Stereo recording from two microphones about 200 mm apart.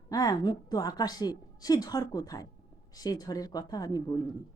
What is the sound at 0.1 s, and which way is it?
A woman's voice, 20° left (ahead or behind).